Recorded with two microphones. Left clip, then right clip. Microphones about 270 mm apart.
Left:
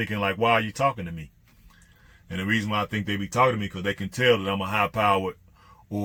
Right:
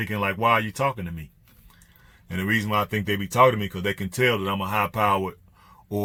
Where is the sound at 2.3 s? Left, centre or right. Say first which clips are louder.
Right 2 dB; centre.